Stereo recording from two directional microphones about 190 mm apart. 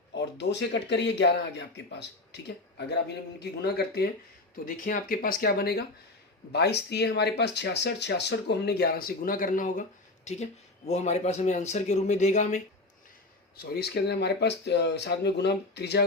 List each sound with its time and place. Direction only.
0.1 s speech: 65° left (ahead or behind)
4.6 s speech: 45° left (ahead or behind)
13.6 s speech: 55° left (ahead or behind)